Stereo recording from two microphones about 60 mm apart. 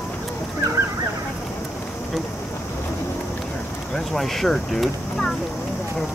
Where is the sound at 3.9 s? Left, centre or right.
Centre.